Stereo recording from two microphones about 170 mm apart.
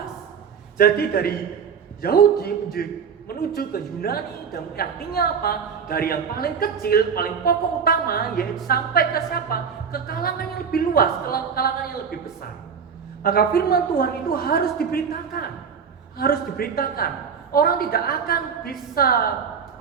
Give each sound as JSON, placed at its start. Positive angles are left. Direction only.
{"t": 0.8, "sound": "a woman's voice", "side_deg": 60}
{"t": 13.2, "sound": "a woman's voice", "side_deg": 60}